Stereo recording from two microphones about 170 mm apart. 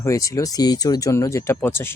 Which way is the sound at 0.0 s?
20° left (ahead or behind).